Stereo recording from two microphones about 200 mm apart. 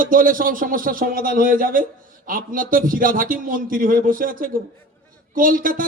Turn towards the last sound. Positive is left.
turn(degrees=-45)  # may be behind; listen again after turning